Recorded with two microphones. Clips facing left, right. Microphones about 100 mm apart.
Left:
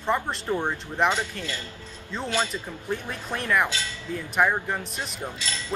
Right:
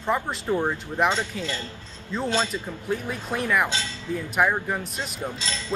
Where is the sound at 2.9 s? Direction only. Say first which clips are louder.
Right 3 dB; 5° right (ahead or behind).